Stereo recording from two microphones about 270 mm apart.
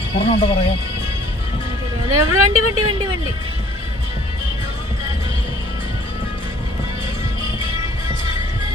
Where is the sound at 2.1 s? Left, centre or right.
Right.